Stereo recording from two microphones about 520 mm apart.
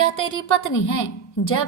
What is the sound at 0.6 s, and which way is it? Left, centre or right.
A woman's voice, left.